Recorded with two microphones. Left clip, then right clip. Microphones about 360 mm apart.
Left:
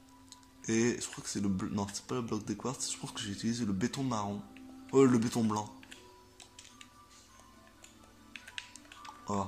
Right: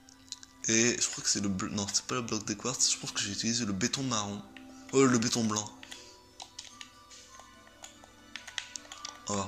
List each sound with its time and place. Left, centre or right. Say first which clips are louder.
0.6 s speech: right 4 dB; centre
9.0 s music: right 1 dB; centre